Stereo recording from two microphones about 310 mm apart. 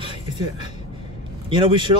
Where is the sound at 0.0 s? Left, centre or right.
Centre.